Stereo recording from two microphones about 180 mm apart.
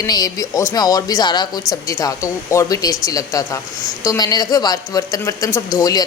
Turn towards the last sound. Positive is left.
turn(degrees=20)  # may be behind; listen again after turning